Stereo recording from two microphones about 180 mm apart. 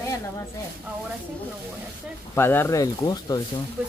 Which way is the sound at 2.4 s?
10° left (ahead or behind).